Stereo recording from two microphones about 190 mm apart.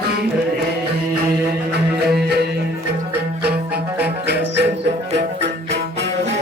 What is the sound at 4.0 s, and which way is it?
Music, 60° right (ahead or behind).